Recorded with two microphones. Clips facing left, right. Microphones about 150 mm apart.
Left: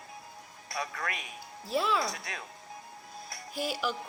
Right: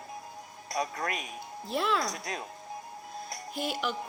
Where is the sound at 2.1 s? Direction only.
40° right (ahead or behind).